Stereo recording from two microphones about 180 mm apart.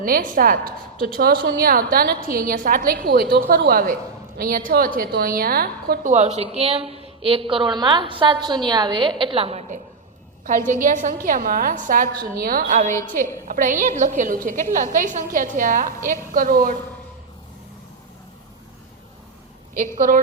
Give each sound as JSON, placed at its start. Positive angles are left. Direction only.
{"t": 0.0, "sound": "a woman's voice", "side_deg": -50}
{"t": 5.9, "sound": "a woman's voice", "side_deg": -45}
{"t": 12.9, "sound": "a woman's voice", "side_deg": 15}
{"t": 13.5, "sound": "a woman's voice", "side_deg": -45}